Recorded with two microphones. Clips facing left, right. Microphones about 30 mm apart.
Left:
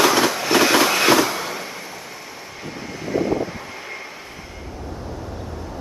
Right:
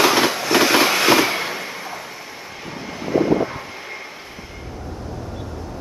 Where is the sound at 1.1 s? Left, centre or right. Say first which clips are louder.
Right 1 dB; right.